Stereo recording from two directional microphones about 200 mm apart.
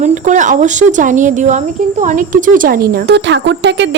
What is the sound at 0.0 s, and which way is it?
Speech, 40° right (ahead or behind).